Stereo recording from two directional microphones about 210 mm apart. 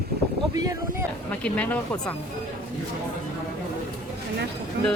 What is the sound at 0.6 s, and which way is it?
Speech, 15° right (ahead or behind).